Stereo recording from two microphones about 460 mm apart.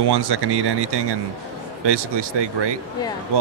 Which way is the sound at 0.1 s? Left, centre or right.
Right.